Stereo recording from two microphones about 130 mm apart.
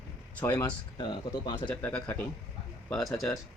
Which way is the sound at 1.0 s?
40° left (ahead or behind).